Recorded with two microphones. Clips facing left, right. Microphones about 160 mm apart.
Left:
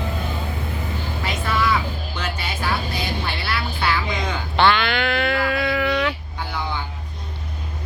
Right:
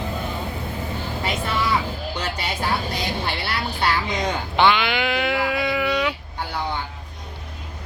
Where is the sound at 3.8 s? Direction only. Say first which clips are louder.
Right 1 dB; 35° right (ahead or behind).